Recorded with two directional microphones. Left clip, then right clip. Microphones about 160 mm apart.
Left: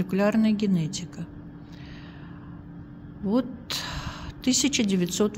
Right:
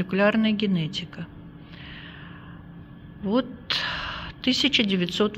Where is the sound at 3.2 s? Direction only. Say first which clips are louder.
Right 2 dB; 10° left (ahead or behind).